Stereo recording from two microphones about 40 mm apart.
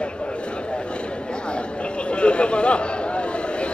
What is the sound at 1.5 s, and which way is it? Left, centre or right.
Chatter, left.